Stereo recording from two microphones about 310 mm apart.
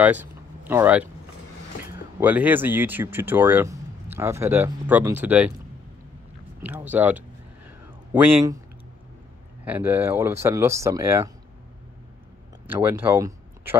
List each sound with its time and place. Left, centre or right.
0.0 s speech: centre
2.1 s speech: centre
6.6 s speech: centre
7.8 s a sound: centre
9.7 s speech: centre
12.6 s speech: centre